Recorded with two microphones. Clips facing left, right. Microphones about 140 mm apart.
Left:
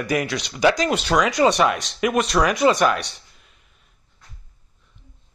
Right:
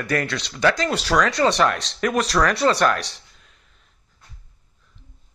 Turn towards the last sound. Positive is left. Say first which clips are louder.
# even
turn(degrees=5)  # may be behind; listen again after turning